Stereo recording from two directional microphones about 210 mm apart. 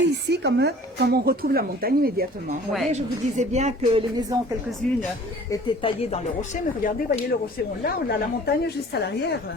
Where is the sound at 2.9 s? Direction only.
30° right (ahead or behind).